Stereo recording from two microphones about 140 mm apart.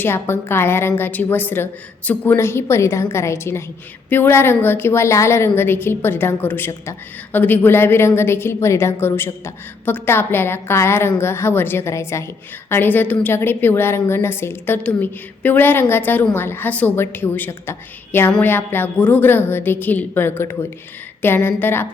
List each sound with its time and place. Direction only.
0.0 s a woman's voice: 15° left (ahead or behind)